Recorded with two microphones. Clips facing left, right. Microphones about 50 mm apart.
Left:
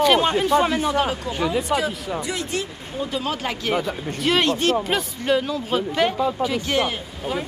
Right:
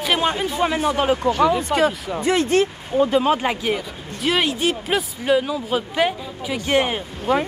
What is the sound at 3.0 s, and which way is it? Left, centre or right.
Speech, right.